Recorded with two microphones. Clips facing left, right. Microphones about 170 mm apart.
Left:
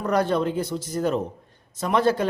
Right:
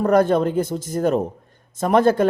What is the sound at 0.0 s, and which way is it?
Speech, 50° right (ahead or behind).